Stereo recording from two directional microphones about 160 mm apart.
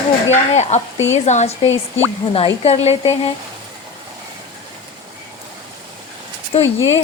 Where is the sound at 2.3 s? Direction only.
35° left (ahead or behind).